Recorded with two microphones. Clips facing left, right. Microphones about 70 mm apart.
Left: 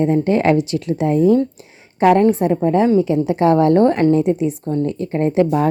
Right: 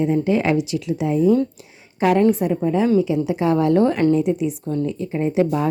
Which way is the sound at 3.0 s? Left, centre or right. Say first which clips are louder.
Left 4 dB; left.